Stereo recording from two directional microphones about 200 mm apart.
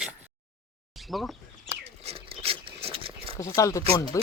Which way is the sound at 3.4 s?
15° left (ahead or behind).